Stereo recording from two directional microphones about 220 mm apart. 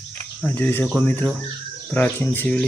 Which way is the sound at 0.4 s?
10° left (ahead or behind).